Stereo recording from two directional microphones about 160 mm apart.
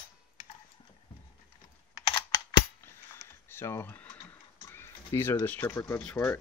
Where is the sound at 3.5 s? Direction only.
15° left (ahead or behind).